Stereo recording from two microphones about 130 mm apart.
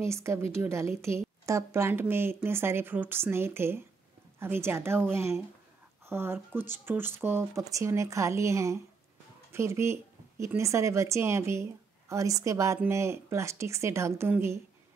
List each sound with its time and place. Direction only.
0.0 s speech: 20° right (ahead or behind)